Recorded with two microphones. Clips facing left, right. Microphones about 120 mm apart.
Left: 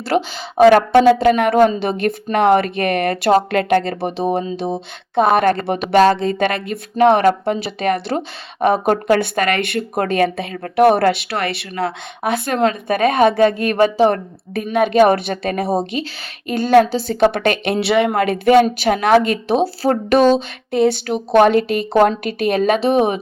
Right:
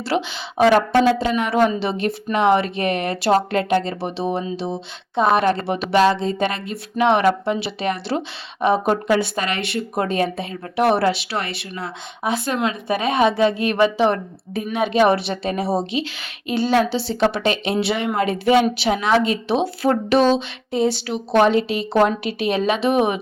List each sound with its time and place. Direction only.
0.0 s speech: 45° left (ahead or behind)
0.7 s speech: 65° left (ahead or behind)
6.9 s speech: 45° left (ahead or behind); by 10.8 s 65° left (ahead or behind)
10.8 s speech: 50° left (ahead or behind)
12.5 s speech: 45° left (ahead or behind)
14.5 s speech: 55° left (ahead or behind)
20.7 s speech: 55° left (ahead or behind)
22.9 s speech: 35° left (ahead or behind)